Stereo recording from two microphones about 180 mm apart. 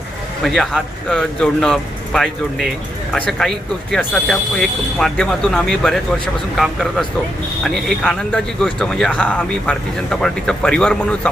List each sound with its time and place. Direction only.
0.4 s speech: centre (ahead or behind)